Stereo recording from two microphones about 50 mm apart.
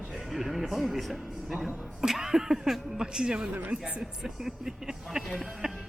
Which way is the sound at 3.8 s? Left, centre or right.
Right.